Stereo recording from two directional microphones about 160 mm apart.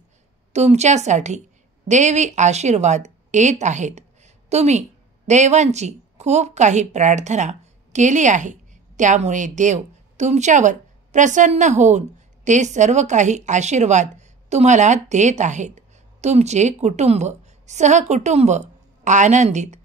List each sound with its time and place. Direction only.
0.5 s a woman's voice: 45° right (ahead or behind)